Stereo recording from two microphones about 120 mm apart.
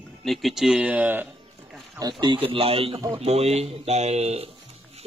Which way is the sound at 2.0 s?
35° right (ahead or behind).